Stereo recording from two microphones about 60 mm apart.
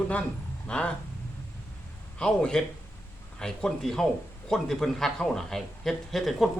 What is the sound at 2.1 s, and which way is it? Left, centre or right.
A man's voice, centre.